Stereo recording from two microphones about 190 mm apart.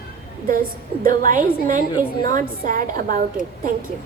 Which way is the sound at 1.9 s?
20° left (ahead or behind).